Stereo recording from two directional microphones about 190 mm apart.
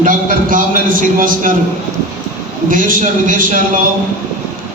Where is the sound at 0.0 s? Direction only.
45° right (ahead or behind).